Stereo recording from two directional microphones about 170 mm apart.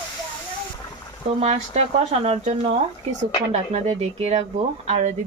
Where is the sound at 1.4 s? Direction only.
40° right (ahead or behind).